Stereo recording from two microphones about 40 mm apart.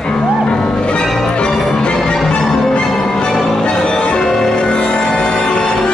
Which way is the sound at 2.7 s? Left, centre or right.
Left.